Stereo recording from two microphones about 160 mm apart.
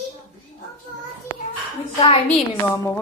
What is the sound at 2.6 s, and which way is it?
Speech, 15° left (ahead or behind).